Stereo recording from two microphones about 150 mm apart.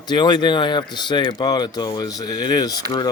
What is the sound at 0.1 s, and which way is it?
Speech, 30° left (ahead or behind).